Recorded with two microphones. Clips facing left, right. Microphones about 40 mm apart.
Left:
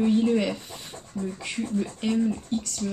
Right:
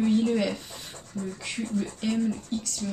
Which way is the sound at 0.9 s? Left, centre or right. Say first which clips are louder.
Left 3 dB; left.